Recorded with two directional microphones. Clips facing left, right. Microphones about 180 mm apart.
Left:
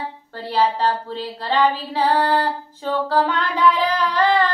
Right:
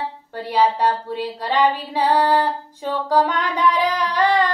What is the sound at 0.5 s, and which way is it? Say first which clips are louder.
Female singing: right 1 dB; 15° right (ahead or behind).